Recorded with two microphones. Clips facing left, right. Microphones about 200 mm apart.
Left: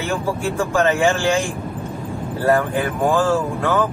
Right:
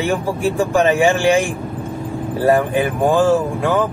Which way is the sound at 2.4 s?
15° right (ahead or behind).